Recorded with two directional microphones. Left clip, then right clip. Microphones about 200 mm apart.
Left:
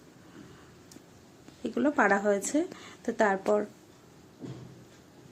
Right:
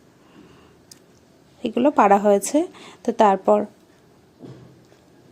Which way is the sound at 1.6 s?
30° right (ahead or behind).